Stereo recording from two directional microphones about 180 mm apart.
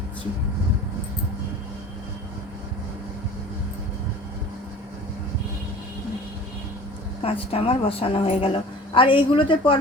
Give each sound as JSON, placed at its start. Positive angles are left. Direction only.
{"t": 7.2, "sound": "a woman's voice", "side_deg": 30}